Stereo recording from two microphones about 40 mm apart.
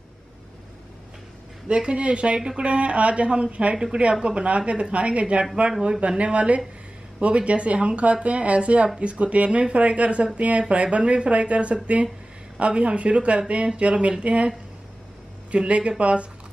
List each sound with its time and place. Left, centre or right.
1.7 s speech: right
3.7 s speech: centre
5.7 s speech: centre
5.9 s speech: right
15.5 s speech: right